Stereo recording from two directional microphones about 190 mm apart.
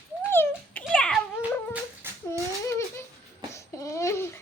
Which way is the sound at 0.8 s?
5° left (ahead or behind).